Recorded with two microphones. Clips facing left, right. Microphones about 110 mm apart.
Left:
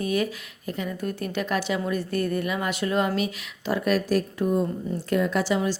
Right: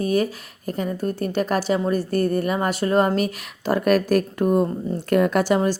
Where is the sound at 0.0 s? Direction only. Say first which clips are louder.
Right 4 dB; 35° right (ahead or behind).